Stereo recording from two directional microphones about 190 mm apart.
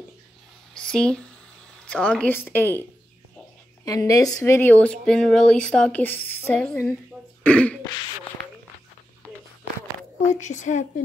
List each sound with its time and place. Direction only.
0.7 s a sound: 5° left (ahead or behind)
1.9 s a woman's voice: 5° left (ahead or behind)
3.8 s a woman's voice: 15° left (ahead or behind)
7.4 s throat clearing: 5° left (ahead or behind)
9.2 s a sound: 5° left (ahead or behind)
10.2 s a woman's voice: 40° left (ahead or behind)